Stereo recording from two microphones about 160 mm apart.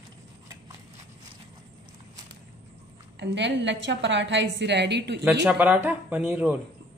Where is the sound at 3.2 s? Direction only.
90° right.